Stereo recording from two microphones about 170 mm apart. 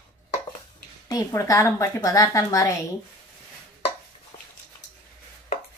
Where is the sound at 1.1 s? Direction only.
20° left (ahead or behind).